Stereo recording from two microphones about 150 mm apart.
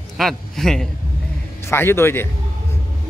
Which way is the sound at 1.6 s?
15° left (ahead or behind).